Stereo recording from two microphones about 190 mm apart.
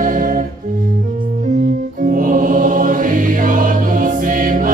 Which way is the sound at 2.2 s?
45° right (ahead or behind).